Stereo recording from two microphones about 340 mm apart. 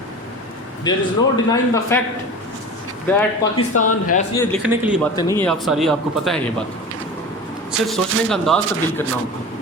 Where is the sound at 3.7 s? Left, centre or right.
Left.